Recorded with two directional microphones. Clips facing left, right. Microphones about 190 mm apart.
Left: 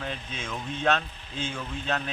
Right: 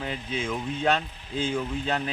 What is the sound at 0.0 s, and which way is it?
Speech, 15° right (ahead or behind).